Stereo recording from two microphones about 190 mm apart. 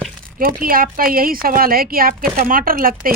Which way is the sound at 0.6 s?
50° right (ahead or behind).